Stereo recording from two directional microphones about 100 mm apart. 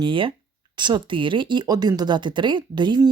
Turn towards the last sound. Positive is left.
turn(degrees=-50)  # may be behind; listen again after turning